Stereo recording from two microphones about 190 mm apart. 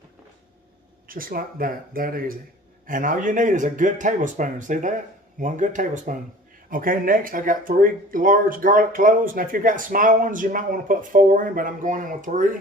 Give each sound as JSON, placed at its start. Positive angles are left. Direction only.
{"t": 1.0, "sound": "speech", "side_deg": -50}